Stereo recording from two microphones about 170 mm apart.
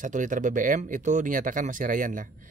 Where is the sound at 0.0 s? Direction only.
50° right (ahead or behind).